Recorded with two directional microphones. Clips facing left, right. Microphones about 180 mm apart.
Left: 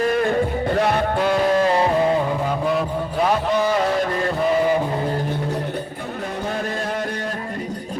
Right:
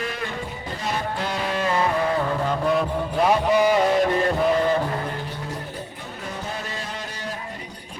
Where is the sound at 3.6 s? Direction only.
10° right (ahead or behind).